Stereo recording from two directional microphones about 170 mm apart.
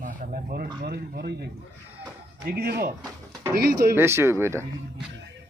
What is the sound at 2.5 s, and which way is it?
Speech, 65° right (ahead or behind).